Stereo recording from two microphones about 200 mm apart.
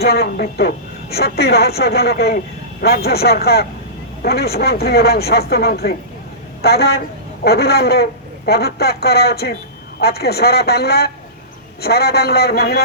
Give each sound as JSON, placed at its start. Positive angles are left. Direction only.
{"t": 0.0, "sound": "speech", "side_deg": 50}